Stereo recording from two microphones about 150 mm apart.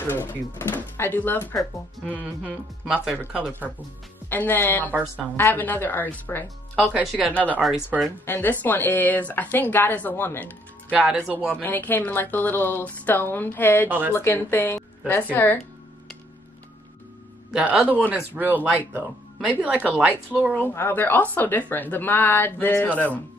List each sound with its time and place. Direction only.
0.1 s a woman's voice: 15° left (ahead or behind)
2.9 s speech: 5° right (ahead or behind)
4.3 s a woman's voice: 10° left (ahead or behind)
6.9 s speech: 5° right (ahead or behind)
8.3 s a woman's voice: 10° left (ahead or behind)
10.9 s speech: 5° right (ahead or behind)
11.6 s a woman's voice: 10° left (ahead or behind)
13.8 s speech: 15° right (ahead or behind)
14.1 s a woman's voice: 15° left (ahead or behind)
17.5 s speech: 5° right (ahead or behind)
20.5 s a woman's voice: 15° left (ahead or behind)